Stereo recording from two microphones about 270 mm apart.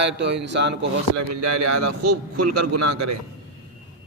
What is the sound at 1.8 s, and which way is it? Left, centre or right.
A man's voice, right.